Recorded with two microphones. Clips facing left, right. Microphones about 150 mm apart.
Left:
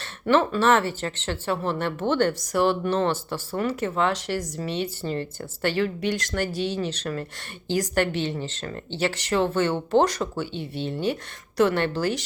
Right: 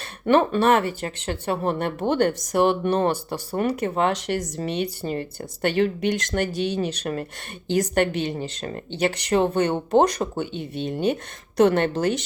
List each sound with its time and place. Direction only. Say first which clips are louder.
0.3 s speech: right 2 dB; 15° right (ahead or behind)